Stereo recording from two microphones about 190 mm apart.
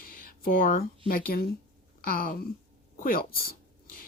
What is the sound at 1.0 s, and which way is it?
Speech, 50° left (ahead or behind).